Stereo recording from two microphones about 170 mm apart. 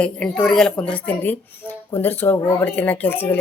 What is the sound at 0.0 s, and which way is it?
Speech, 5° left (ahead or behind).